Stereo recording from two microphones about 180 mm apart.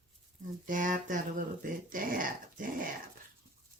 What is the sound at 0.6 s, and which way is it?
Speech, 45° right (ahead or behind).